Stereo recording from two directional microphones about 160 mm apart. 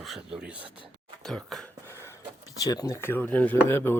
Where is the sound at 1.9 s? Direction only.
15° left (ahead or behind).